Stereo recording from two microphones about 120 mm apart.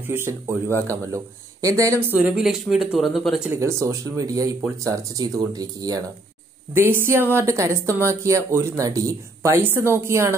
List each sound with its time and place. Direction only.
0.0 s speech: 20° right (ahead or behind)
2.3 s speech: centre (ahead or behind)
3.5 s speech: 25° right (ahead or behind)
6.7 s speech: 20° right (ahead or behind)